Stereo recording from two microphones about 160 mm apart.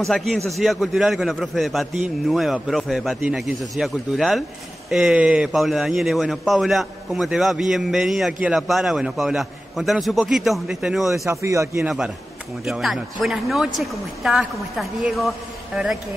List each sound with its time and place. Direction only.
0.1 s speech: centre (ahead or behind)
11.2 s a man's voice: 20° right (ahead or behind)
12.6 s speech: centre (ahead or behind)